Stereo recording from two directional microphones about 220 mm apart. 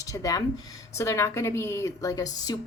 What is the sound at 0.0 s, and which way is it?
A woman's voice, 15° left (ahead or behind).